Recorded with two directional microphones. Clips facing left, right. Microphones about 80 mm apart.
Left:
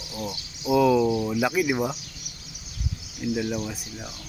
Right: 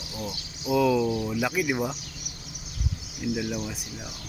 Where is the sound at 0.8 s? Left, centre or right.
Centre.